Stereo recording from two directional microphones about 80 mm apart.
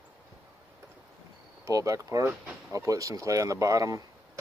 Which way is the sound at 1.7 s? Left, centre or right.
Right.